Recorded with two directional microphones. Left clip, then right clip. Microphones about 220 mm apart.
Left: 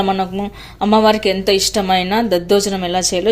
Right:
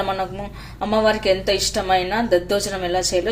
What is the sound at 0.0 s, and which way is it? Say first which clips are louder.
A woman's voice: left 6 dB; 35° left (ahead or behind).